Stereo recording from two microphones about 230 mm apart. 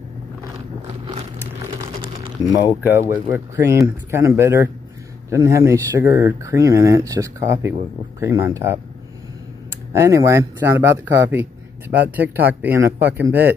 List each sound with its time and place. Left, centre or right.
2.4 s speech: centre
9.9 s speech: centre